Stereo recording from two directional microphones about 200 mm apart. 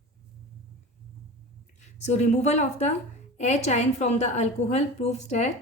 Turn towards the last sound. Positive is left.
turn(degrees=35)  # may be behind; listen again after turning